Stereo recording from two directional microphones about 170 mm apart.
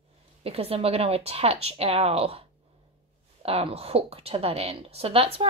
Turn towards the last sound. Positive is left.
turn(degrees=-35)  # may be behind; listen again after turning